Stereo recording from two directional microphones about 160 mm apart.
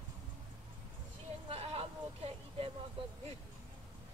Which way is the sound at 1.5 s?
40° right (ahead or behind).